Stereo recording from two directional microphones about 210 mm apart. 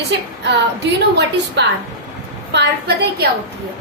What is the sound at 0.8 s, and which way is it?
Speech, 55° right (ahead or behind).